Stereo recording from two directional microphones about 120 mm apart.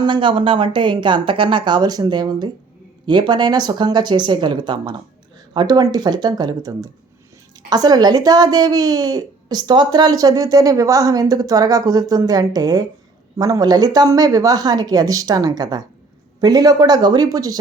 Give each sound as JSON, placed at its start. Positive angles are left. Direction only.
{"t": 0.0, "sound": "a woman's voice", "side_deg": -45}